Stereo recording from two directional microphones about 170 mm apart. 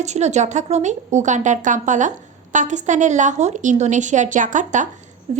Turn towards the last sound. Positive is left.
turn(degrees=-45)  # may be behind; listen again after turning